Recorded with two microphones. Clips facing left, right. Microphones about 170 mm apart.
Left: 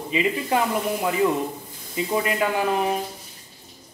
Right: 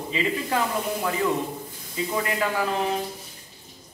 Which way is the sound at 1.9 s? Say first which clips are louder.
Left 3 dB; 20° left (ahead or behind).